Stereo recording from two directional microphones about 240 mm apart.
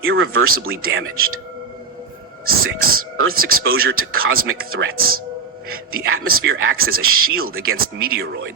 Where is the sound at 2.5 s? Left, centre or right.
Right.